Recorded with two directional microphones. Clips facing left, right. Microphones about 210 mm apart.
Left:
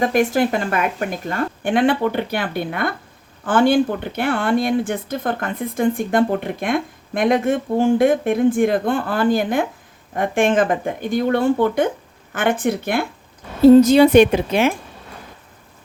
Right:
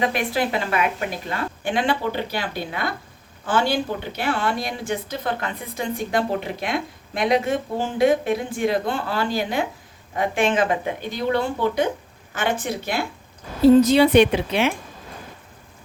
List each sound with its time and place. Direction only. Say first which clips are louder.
0.0 s a woman's voice: left 6 dB; 45° left (ahead or behind)